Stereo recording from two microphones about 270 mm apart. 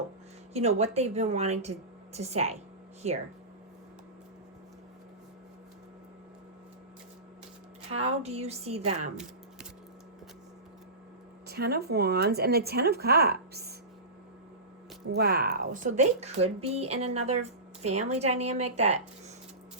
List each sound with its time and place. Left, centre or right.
0.5 s speech: right
7.9 s speech: right
11.4 s a woman's voice: right
15.1 s speech: right